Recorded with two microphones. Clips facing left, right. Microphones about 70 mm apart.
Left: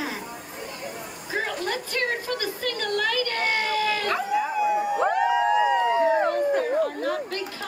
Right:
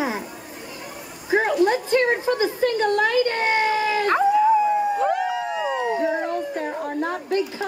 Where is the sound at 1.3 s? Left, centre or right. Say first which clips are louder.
Right 10 dB; right.